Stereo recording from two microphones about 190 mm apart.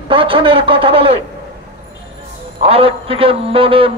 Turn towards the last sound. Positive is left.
turn(degrees=-30)  # may be behind; listen again after turning